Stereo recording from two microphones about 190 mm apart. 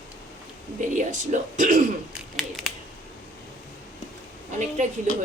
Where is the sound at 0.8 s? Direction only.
40° right (ahead or behind).